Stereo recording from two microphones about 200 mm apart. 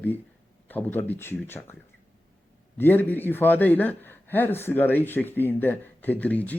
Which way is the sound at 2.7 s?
10° left (ahead or behind).